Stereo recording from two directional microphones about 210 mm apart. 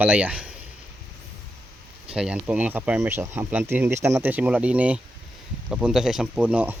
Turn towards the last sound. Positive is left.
turn(degrees=-5)  # may be behind; listen again after turning